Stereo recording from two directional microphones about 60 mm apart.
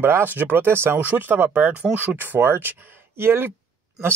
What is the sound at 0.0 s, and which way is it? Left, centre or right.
Speech, right.